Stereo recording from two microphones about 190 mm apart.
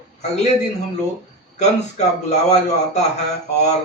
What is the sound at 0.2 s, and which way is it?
Speech, 35° left (ahead or behind).